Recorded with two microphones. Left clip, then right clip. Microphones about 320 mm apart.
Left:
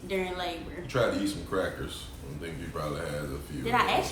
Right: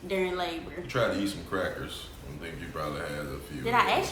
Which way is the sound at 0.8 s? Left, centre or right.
Centre.